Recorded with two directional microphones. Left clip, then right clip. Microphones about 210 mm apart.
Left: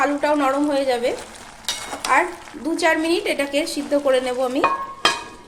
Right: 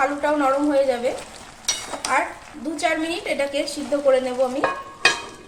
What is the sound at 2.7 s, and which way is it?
Speech, 60° left (ahead or behind).